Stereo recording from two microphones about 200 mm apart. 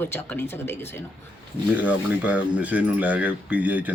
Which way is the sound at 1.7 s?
5° right (ahead or behind).